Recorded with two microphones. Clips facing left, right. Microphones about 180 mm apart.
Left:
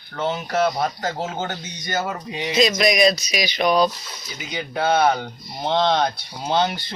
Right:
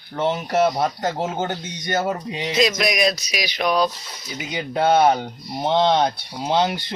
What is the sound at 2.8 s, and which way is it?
Speech, 5° right (ahead or behind).